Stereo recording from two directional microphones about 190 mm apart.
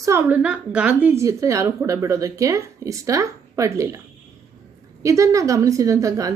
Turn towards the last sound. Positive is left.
turn(degrees=-15)  # may be behind; listen again after turning